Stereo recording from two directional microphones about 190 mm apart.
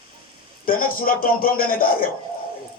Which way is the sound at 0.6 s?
50° left (ahead or behind).